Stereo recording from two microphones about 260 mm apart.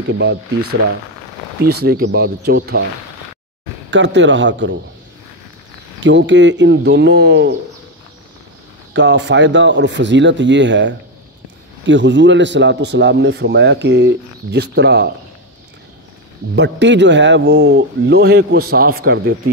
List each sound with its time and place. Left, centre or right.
0.1 s a man's voice: right
1.6 s a man's voice: right
3.9 s a man's voice: right
5.9 s a man's voice: right
8.9 s a man's voice: right
16.5 s a man's voice: right